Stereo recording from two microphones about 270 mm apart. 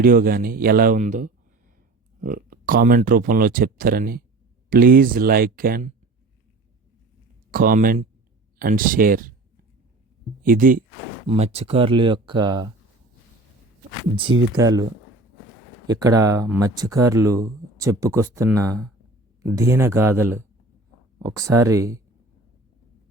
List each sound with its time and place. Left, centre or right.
0.0 s speech: right
7.5 s speech: right
10.4 s speech: right; by 12.7 s centre
14.5 s speech: centre
15.9 s speech: centre